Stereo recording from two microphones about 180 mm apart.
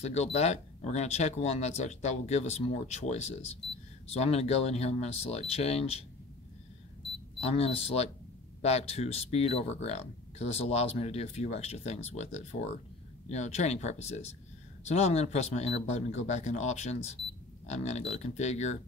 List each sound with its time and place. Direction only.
0.0 s speech: 40° left (ahead or behind)
7.3 s speech: 35° left (ahead or behind)